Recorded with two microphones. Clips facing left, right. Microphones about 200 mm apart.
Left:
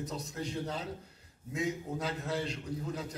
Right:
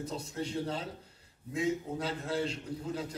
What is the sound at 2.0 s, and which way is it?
A man's voice, 30° right (ahead or behind).